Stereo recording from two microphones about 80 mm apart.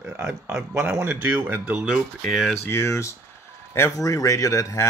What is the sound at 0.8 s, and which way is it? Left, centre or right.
Speech, right.